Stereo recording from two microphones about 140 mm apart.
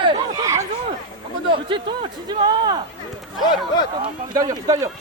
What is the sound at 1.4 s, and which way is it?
Speech, 35° right (ahead or behind).